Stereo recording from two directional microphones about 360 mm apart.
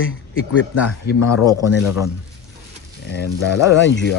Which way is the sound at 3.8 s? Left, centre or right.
Left.